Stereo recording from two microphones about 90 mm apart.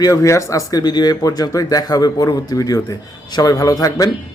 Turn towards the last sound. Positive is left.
turn(degrees=40)  # may be behind; listen again after turning